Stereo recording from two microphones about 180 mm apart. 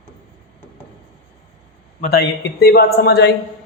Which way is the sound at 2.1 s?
60° left (ahead or behind).